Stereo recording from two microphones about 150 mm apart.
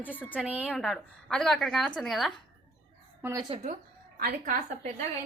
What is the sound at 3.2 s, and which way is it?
Speech, 20° right (ahead or behind).